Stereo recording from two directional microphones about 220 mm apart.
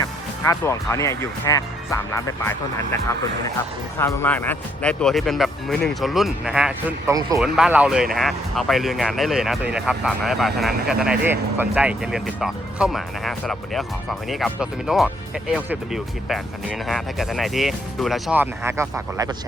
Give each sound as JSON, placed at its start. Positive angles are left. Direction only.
{"t": 0.4, "sound": "speech", "side_deg": 10}
{"t": 7.1, "sound": "speech", "side_deg": -15}
{"t": 7.3, "sound": "speech", "side_deg": 0}